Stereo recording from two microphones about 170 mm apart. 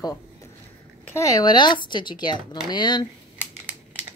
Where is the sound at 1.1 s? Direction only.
20° left (ahead or behind).